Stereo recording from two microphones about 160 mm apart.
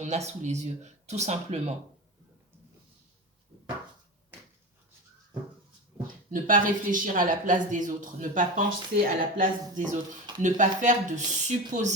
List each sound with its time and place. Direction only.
0.0 s speech: 45° right (ahead or behind)
6.3 s speech: 55° right (ahead or behind)